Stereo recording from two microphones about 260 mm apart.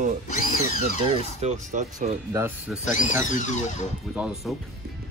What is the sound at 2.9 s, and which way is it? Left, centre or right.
Speech, left.